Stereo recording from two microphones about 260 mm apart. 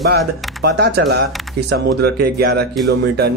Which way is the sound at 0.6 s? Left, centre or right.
Right.